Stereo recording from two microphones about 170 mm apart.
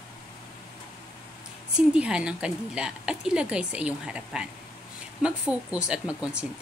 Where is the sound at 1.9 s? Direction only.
5° right (ahead or behind).